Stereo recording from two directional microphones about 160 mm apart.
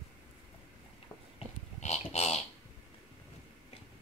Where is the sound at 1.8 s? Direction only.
45° left (ahead or behind).